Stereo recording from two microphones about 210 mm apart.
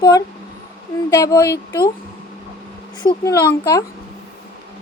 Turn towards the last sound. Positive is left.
turn(degrees=15)  # may be behind; listen again after turning